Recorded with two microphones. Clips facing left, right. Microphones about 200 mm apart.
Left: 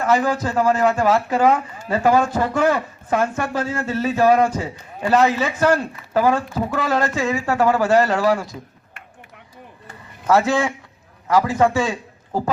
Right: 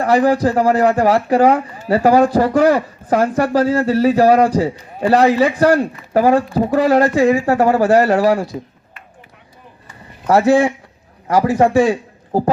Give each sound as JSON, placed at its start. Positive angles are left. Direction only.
{"t": 0.0, "sound": "speech", "side_deg": -35}
{"t": 10.2, "sound": "speech", "side_deg": -30}